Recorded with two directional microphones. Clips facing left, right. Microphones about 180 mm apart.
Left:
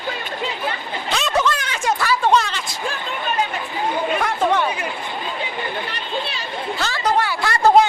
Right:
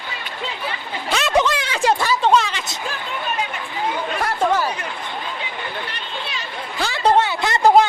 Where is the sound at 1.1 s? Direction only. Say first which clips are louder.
Right 2 dB; centre (ahead or behind).